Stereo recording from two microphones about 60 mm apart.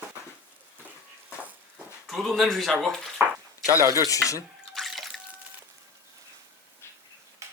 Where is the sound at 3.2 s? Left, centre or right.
Right.